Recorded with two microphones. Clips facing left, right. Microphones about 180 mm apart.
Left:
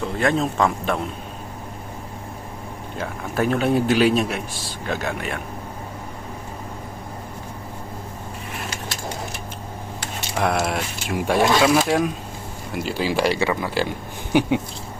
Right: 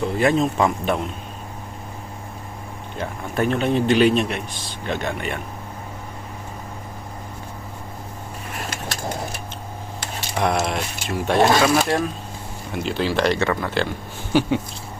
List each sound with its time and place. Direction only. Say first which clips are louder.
0.2 s speech: right 1 dB; 5° right (ahead or behind)
3.0 s speech: even; 5° left (ahead or behind)
10.3 s speech: even; 5° left (ahead or behind)